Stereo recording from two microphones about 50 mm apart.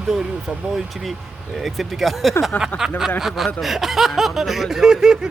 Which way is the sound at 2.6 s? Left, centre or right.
Centre.